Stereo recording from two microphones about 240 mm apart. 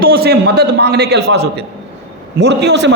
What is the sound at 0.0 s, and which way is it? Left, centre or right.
A man's voice, right.